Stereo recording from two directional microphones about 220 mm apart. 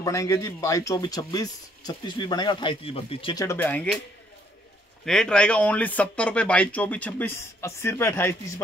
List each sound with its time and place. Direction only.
0.0 s speech: 15° left (ahead or behind)
3.4 s speech: 10° left (ahead or behind)
5.0 s speech: 5° left (ahead or behind)